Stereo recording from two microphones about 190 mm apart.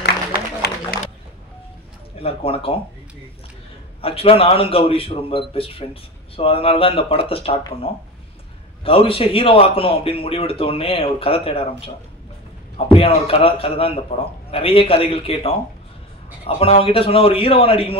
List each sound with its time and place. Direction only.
0.0 s a sound: 60° left (ahead or behind)
2.2 s a man's voice: 30° left (ahead or behind)
4.0 s a man's voice: 30° left (ahead or behind)
12.9 s a man's voice: 30° left (ahead or behind)